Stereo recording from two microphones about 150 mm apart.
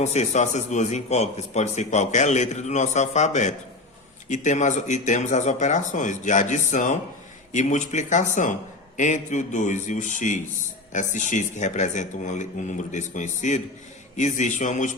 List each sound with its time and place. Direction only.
0.0 s a man's voice: 50° left (ahead or behind)